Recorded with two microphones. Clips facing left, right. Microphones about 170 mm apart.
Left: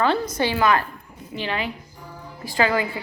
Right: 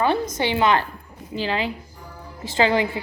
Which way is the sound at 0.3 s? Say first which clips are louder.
Even; 20° right (ahead or behind).